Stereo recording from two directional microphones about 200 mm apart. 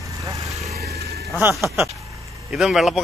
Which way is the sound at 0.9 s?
55° right (ahead or behind).